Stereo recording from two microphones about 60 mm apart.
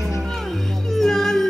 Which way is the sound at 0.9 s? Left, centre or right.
Centre.